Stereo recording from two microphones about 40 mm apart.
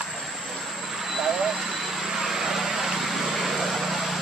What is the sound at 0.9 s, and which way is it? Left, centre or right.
Vehicle, centre.